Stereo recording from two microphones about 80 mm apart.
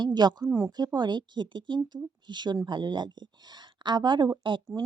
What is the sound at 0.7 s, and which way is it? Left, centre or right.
Speech, right.